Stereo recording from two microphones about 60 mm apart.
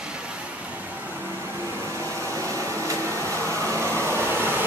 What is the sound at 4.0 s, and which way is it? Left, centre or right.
Vehicle, right.